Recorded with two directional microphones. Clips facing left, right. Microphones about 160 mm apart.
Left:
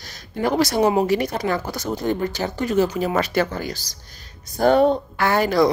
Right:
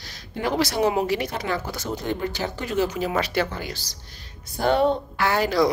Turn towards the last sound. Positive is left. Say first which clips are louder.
# left 3 dB
turn(degrees=50)  # may be behind; listen again after turning